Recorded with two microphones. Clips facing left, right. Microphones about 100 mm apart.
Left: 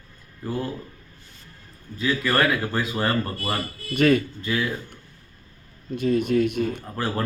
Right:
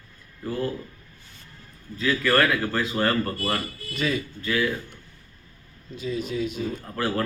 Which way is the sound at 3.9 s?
55° left (ahead or behind).